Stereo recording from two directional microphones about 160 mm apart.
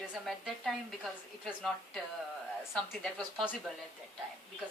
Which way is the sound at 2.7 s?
5° left (ahead or behind).